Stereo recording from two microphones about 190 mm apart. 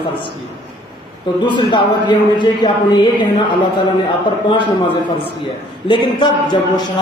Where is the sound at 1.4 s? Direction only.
25° left (ahead or behind).